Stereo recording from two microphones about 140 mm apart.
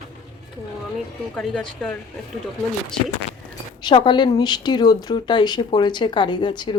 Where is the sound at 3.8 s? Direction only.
35° left (ahead or behind).